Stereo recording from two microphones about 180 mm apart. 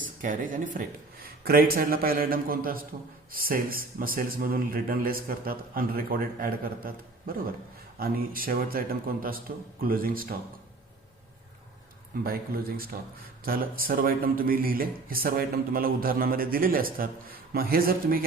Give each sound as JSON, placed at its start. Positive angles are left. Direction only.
{"t": 0.2, "sound": "a man's voice", "side_deg": -45}
{"t": 12.2, "sound": "a man's voice", "side_deg": -55}